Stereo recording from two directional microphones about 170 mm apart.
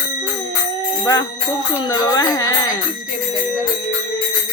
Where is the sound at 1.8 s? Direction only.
20° left (ahead or behind).